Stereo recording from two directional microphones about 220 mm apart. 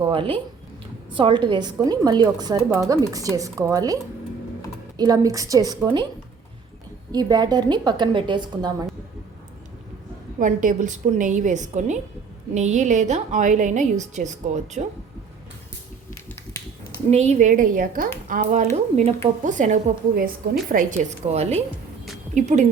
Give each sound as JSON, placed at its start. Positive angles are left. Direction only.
{"t": 0.0, "sound": "a woman's voice", "side_deg": -25}
{"t": 7.1, "sound": "a woman's voice", "side_deg": -20}
{"t": 10.4, "sound": "speech", "side_deg": -35}
{"t": 17.1, "sound": "speech", "side_deg": -30}